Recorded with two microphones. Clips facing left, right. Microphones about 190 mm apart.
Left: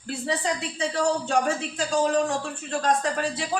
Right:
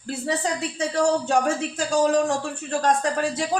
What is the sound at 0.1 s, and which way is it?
Speech, 45° right (ahead or behind).